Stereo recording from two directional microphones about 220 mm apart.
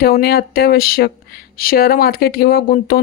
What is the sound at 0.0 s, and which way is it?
Speech, 45° left (ahead or behind).